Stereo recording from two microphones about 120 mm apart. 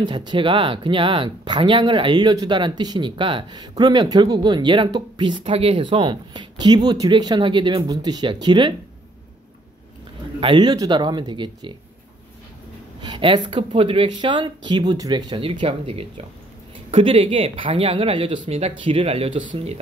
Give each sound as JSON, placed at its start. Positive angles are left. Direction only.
{"t": 0.0, "sound": "speech", "side_deg": -40}
{"t": 10.4, "sound": "speech", "side_deg": -40}
{"t": 13.0, "sound": "speech", "side_deg": -40}